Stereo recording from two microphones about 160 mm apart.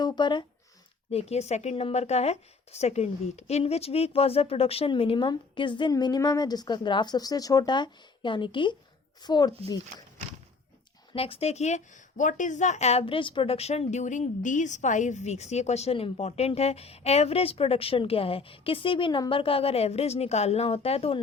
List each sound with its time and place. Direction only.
0.0 s speech: 30° left (ahead or behind)
1.1 s a woman's voice: 40° left (ahead or behind); by 9.5 s 25° left (ahead or behind)
11.1 s a woman's voice: 35° left (ahead or behind)